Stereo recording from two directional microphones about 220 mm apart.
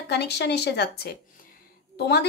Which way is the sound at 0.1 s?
50° left (ahead or behind).